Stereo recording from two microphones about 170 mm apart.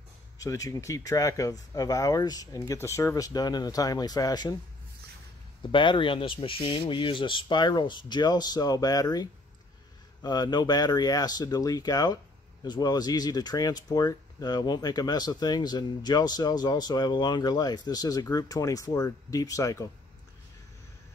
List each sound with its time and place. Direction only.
0.4 s speech: 20° left (ahead or behind)
5.6 s speech: 30° left (ahead or behind)